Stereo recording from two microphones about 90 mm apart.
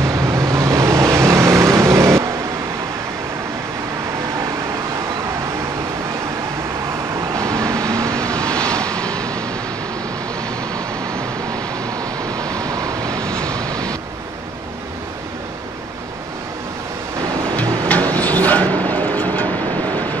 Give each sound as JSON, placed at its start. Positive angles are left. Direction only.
{"t": 0.0, "sound": "vehicle", "side_deg": -35}
{"t": 7.3, "sound": "vehicle", "side_deg": -35}
{"t": 8.2, "sound": "vehicle", "side_deg": 10}
{"t": 12.7, "sound": "vehicle", "side_deg": -40}
{"t": 13.2, "sound": "vehicle", "side_deg": 10}
{"t": 17.6, "sound": "a sound", "side_deg": 15}
{"t": 18.1, "sound": "vehicle", "side_deg": 15}